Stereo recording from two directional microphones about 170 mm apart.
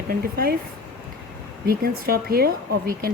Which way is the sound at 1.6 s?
60° right (ahead or behind).